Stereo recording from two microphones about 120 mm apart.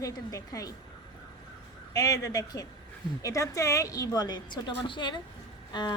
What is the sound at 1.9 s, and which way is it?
A woman's voice, 30° left (ahead or behind).